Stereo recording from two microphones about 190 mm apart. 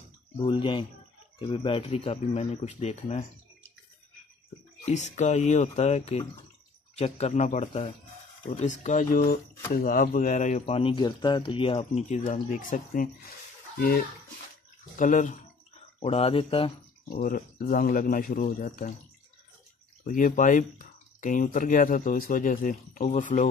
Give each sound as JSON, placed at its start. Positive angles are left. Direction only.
{"t": 0.4, "sound": "speech", "side_deg": 25}
{"t": 4.8, "sound": "speech", "side_deg": 40}
{"t": 10.6, "sound": "speech", "side_deg": 30}
{"t": 15.0, "sound": "speech", "side_deg": 40}
{"t": 17.1, "sound": "speech", "side_deg": 45}
{"t": 20.1, "sound": "speech", "side_deg": 45}